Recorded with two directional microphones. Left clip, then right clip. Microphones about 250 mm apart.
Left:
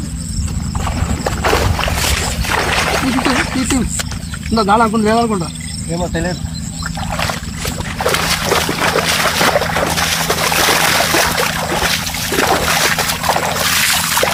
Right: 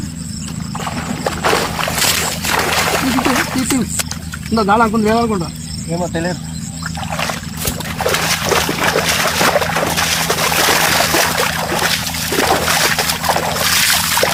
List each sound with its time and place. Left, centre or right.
0.9 s boat: right
4.5 s speech: centre
6.0 s speech: right
7.1 s rowboat: centre
7.9 s a sound: centre